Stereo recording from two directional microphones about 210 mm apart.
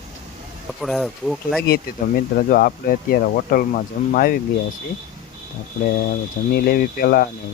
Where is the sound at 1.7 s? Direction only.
45° left (ahead or behind).